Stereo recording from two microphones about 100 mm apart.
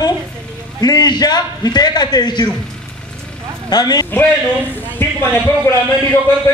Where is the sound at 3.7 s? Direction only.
45° left (ahead or behind).